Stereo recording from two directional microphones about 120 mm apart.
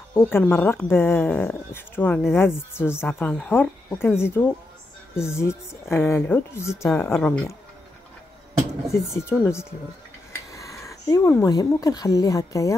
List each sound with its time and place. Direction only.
0.1 s speech: 20° left (ahead or behind)
7.2 s speech: 5° left (ahead or behind)
8.9 s speech: 20° left (ahead or behind)
10.5 s a sound: 25° left (ahead or behind)
11.4 s speech: 30° left (ahead or behind)